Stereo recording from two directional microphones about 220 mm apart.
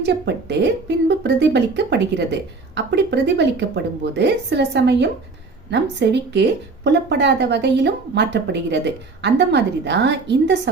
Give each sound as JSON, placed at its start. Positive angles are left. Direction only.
{"t": 0.0, "sound": "a woman's voice", "side_deg": -50}